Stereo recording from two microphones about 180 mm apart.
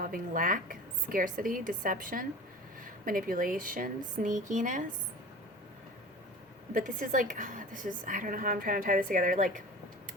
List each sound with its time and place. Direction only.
0.0 s a woman's voice: 50° right (ahead or behind)
6.7 s a woman's voice: 50° right (ahead or behind)